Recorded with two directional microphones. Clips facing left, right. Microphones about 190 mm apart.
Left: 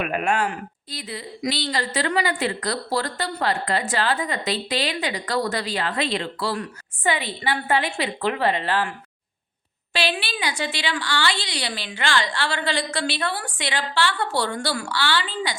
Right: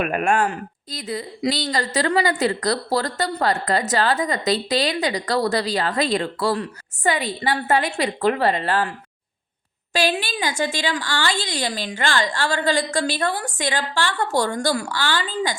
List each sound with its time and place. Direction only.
0.0 s a woman's voice: 45° right (ahead or behind)
9.9 s a woman's voice: 45° right (ahead or behind)